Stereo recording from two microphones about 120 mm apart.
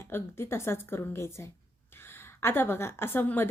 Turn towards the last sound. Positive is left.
turn(degrees=15)  # may be behind; listen again after turning